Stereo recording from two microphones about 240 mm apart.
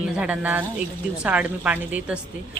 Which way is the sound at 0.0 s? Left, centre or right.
Centre.